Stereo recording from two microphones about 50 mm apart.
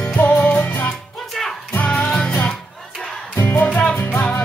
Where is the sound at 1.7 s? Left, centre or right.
Left.